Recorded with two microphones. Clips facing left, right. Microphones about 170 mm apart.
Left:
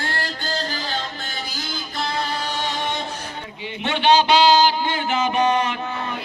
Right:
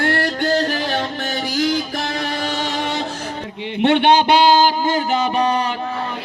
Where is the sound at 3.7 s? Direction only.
60° right (ahead or behind); by 5.6 s 35° right (ahead or behind).